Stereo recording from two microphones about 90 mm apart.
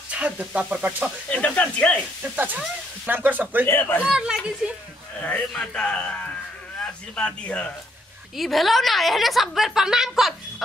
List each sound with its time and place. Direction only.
0.1 s speech: 15° right (ahead or behind)
1.3 s speech: 15° left (ahead or behind)
2.3 s speech: 20° right (ahead or behind)
3.6 s speech: 20° left (ahead or behind)
4.0 s speech: 10° right (ahead or behind)
5.5 s speech: 10° left (ahead or behind)
8.4 s a woman's voice: centre (ahead or behind)